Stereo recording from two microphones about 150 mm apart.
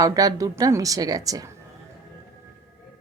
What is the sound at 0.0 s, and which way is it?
Speech, 25° right (ahead or behind).